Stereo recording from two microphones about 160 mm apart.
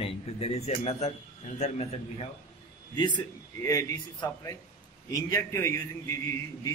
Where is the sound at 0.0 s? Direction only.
40° left (ahead or behind).